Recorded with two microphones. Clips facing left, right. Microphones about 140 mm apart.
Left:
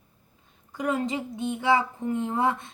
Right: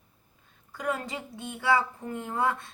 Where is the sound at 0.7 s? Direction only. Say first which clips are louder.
Left 5 dB; 20° left (ahead or behind).